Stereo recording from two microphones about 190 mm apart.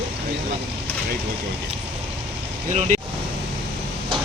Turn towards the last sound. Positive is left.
turn(degrees=-35)  # may be behind; listen again after turning